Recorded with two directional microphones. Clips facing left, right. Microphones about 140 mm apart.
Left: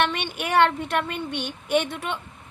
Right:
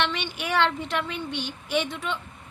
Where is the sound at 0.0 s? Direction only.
50° left (ahead or behind).